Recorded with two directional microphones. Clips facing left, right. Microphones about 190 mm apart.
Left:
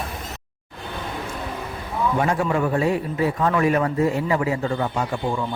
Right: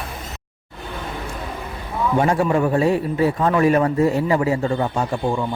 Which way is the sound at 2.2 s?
30° right (ahead or behind).